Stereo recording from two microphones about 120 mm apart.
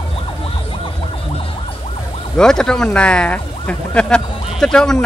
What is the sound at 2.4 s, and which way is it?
Speech, 5° left (ahead or behind).